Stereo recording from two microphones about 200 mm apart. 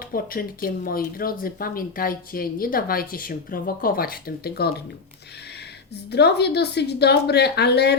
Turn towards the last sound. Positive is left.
turn(degrees=55)  # may be behind; listen again after turning